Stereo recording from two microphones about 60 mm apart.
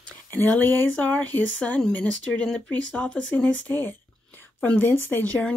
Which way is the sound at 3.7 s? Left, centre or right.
Left.